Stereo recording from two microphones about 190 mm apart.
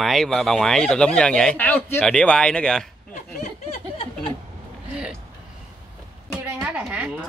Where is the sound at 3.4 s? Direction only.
30° left (ahead or behind).